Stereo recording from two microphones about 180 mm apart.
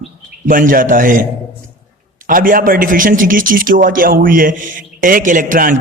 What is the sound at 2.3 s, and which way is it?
A man's voice, 50° right (ahead or behind).